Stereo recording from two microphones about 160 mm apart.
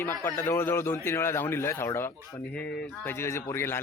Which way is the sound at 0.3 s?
15° left (ahead or behind).